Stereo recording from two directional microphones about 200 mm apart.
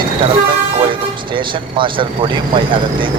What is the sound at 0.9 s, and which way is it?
Speech, 25° right (ahead or behind).